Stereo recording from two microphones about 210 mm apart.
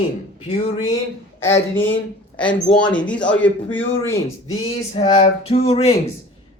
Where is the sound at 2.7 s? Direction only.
30° left (ahead or behind).